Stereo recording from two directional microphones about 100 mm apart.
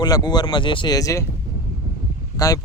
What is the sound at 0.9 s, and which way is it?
Speech, 35° left (ahead or behind).